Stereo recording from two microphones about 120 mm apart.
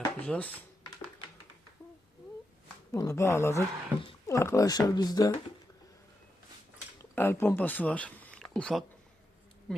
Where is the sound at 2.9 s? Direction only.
25° left (ahead or behind).